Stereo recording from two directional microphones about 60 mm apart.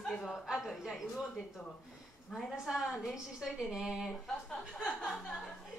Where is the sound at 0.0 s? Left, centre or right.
Centre.